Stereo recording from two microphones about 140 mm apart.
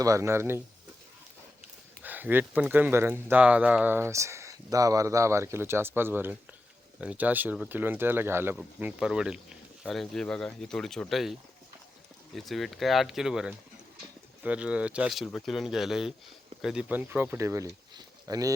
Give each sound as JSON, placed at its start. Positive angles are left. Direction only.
{"t": 0.0, "sound": "speech", "side_deg": -20}
{"t": 2.0, "sound": "speech", "side_deg": -15}